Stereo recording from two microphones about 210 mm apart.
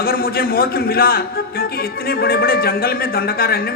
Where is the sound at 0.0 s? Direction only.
45° left (ahead or behind).